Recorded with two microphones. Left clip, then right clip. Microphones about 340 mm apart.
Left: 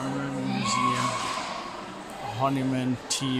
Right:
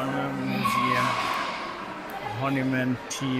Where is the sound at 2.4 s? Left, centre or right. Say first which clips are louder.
Left 1 dB; centre.